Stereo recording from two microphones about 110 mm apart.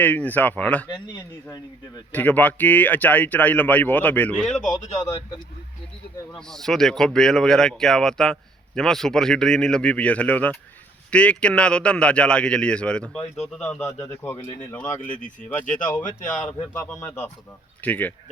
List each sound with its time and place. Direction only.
0.0 s speech: 15° left (ahead or behind)
2.1 s speech: 15° left (ahead or behind)
4.5 s speech: 5° left (ahead or behind)
6.3 s speech: 5° left (ahead or behind)
14.1 s speech: 20° left (ahead or behind)